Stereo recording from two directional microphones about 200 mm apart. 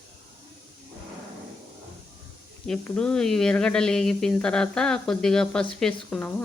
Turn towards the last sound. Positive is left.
turn(degrees=5)  # may be behind; listen again after turning